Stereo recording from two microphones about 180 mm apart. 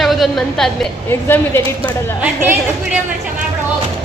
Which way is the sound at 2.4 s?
10° right (ahead or behind).